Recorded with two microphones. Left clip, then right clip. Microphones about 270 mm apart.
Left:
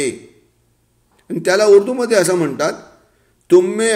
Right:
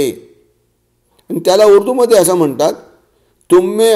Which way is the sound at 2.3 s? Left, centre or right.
Right.